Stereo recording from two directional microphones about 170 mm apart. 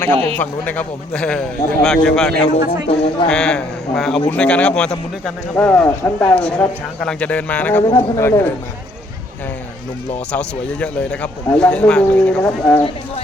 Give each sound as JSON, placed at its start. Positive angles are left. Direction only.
{"t": 0.3, "sound": "a man's voice", "side_deg": 10}
{"t": 2.8, "sound": "speech", "side_deg": 35}
{"t": 3.2, "sound": "a man's voice", "side_deg": 5}
{"t": 10.3, "sound": "a man's voice", "side_deg": 5}